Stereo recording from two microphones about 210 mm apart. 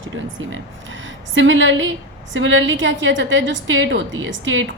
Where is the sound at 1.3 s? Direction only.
65° right (ahead or behind).